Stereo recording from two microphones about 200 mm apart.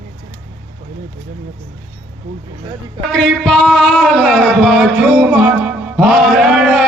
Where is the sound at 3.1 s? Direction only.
5° left (ahead or behind).